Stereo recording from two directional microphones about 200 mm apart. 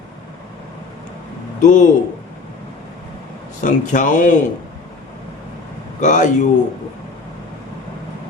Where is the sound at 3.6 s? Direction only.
40° left (ahead or behind).